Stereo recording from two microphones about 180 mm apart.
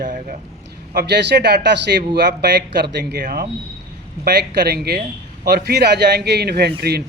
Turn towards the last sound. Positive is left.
turn(degrees=-65)  # may be behind; listen again after turning